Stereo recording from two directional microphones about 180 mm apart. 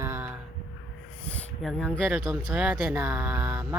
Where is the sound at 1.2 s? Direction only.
10° left (ahead or behind).